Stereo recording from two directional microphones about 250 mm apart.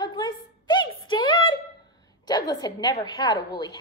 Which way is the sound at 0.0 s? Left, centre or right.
Centre.